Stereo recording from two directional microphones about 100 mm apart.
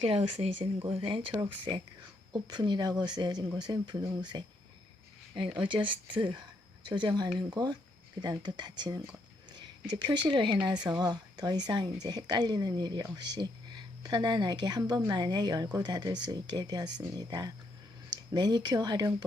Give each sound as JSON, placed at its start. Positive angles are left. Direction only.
{"t": 0.0, "sound": "speech", "side_deg": -85}
{"t": 10.2, "sound": "speech", "side_deg": -50}